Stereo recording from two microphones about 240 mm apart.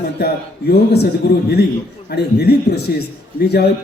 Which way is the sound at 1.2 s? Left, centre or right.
Left.